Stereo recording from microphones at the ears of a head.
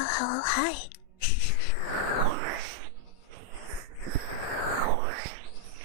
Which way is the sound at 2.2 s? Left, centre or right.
Right.